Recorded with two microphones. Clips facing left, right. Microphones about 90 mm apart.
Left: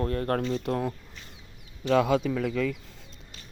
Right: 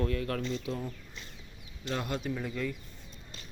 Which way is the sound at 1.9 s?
90° left.